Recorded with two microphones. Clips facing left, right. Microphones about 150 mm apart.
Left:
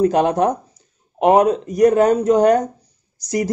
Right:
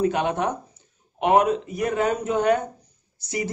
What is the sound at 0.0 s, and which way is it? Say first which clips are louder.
A woman's voice: left 7 dB; 40° left (ahead or behind).